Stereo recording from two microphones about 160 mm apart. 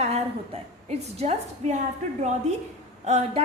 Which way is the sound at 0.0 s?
40° right (ahead or behind).